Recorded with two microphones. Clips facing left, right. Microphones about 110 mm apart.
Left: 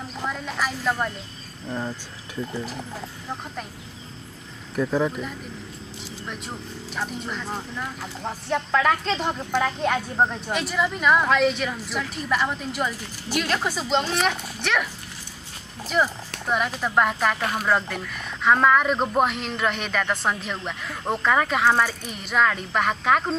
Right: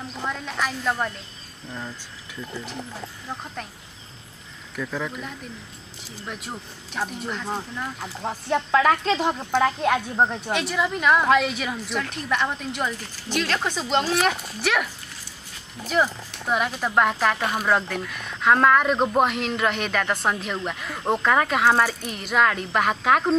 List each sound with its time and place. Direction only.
0.3 s speech: centre (ahead or behind)
1.7 s speech: 25° left (ahead or behind)
4.7 s speech: 25° left (ahead or behind)
6.2 s speech: 5° right (ahead or behind)
15.9 s speech: centre (ahead or behind)
17.4 s speech: 20° right (ahead or behind)
17.6 s speech: centre (ahead or behind)